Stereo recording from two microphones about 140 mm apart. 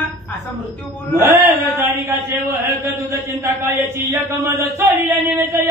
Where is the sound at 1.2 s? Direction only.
15° right (ahead or behind).